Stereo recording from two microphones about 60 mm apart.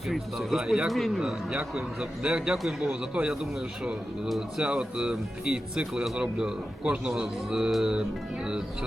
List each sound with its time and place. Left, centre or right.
0.1 s speech: centre
1.7 s a man's voice: centre